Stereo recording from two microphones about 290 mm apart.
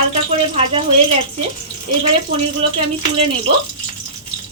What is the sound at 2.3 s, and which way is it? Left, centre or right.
Speech, centre.